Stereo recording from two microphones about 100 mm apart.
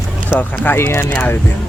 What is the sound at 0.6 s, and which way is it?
Speech, 20° left (ahead or behind).